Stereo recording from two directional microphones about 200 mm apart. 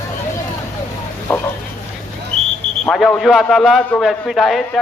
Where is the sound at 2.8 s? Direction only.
Centre (ahead or behind).